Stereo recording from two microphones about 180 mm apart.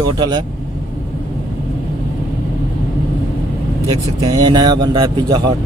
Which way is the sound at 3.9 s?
25° right (ahead or behind).